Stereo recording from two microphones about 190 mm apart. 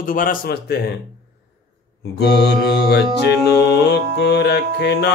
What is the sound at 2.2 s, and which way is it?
Mantra, 60° left (ahead or behind).